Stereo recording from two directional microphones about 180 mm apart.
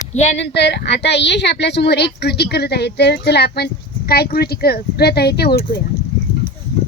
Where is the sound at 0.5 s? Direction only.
70° left (ahead or behind).